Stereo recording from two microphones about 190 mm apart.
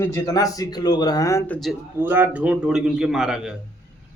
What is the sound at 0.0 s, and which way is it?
Speech, 15° left (ahead or behind).